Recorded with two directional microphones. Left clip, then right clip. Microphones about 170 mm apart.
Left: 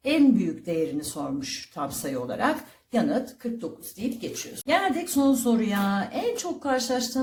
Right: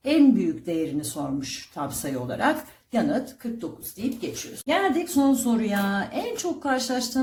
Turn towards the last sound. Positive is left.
turn(degrees=15)  # may be behind; listen again after turning